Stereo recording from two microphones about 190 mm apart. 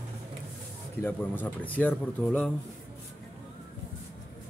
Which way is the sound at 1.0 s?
10° left (ahead or behind).